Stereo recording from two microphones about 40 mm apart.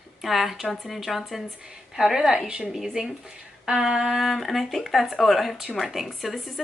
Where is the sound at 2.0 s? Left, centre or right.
Centre.